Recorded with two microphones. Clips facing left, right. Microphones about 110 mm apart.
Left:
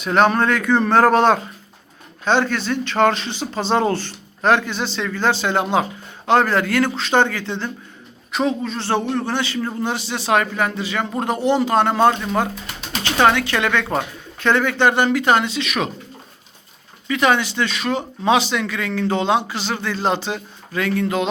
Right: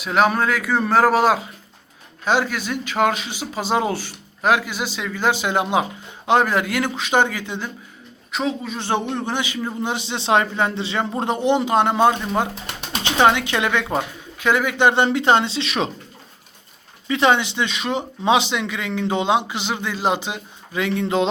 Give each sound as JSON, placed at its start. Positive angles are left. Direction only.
{"t": 0.0, "sound": "speech", "side_deg": -5}
{"t": 8.3, "sound": "a man's voice", "side_deg": 0}
{"t": 8.7, "sound": "speech", "side_deg": -15}
{"t": 17.1, "sound": "speech", "side_deg": -25}